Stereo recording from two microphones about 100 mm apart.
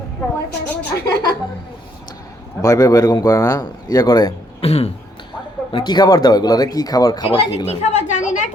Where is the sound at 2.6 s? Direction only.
35° left (ahead or behind).